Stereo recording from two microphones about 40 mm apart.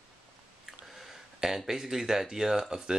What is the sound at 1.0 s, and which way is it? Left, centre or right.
Speech, centre.